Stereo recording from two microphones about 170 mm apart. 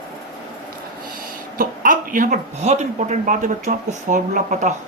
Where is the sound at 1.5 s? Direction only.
55° right (ahead or behind).